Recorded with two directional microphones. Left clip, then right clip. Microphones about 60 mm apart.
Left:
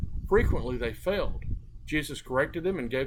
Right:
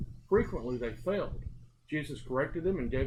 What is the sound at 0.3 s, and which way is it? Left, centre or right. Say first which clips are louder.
Speech: left 4 dB; left.